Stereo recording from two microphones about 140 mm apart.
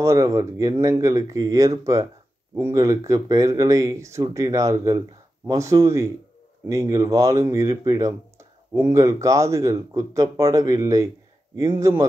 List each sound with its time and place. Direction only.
0.0 s speech: 20° right (ahead or behind)